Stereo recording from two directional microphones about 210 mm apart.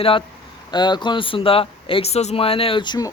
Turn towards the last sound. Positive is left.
turn(degrees=20)  # may be behind; listen again after turning